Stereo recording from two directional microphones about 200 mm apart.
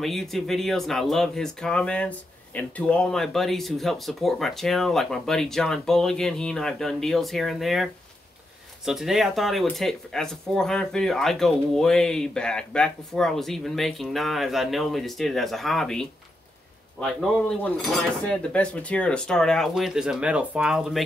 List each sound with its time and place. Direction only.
0.0 s speech: centre (ahead or behind)